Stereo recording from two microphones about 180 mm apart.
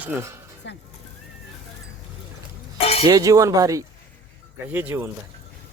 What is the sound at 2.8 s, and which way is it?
Cutlery, 35° left (ahead or behind).